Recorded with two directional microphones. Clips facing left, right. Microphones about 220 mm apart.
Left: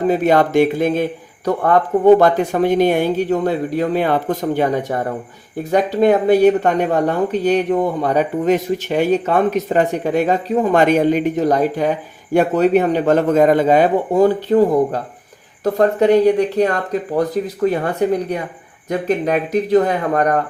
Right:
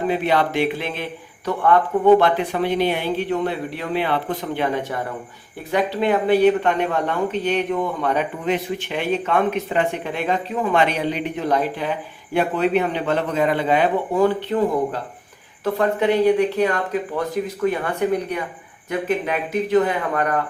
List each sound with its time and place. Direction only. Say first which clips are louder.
0.1 s speech: left 8 dB; 45° left (ahead or behind)